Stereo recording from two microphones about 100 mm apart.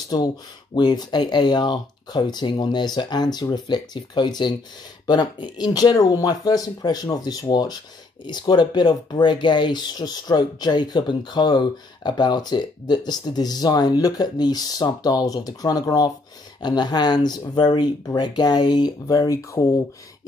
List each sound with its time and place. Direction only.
0.7 s speech: 45° left (ahead or behind)